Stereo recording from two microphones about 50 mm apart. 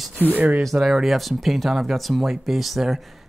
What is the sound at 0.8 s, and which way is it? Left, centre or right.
Speech, centre.